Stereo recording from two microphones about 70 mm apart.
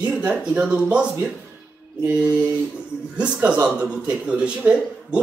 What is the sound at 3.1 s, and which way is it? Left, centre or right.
A man's voice, centre.